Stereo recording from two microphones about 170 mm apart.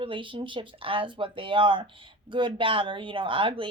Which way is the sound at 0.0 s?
30° right (ahead or behind).